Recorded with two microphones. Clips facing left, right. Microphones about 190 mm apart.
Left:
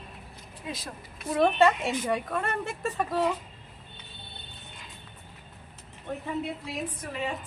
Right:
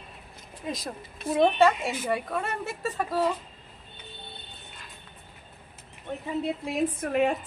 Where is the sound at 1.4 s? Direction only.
Centre (ahead or behind).